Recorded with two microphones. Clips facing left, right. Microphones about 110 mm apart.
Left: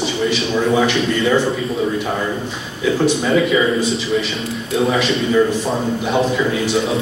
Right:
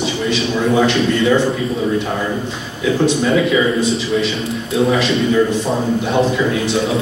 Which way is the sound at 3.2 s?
Centre (ahead or behind).